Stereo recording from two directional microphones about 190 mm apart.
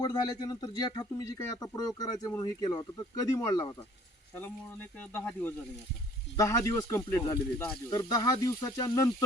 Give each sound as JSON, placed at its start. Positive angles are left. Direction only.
{"t": 0.0, "sound": "a man's voice", "side_deg": 20}
{"t": 4.9, "sound": "a man's voice", "side_deg": 10}